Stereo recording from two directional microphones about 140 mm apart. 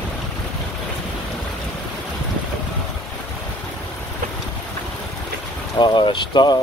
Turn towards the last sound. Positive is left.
turn(degrees=35)  # may be behind; listen again after turning